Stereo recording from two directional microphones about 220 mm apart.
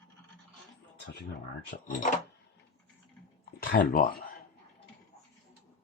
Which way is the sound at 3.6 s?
40° left (ahead or behind).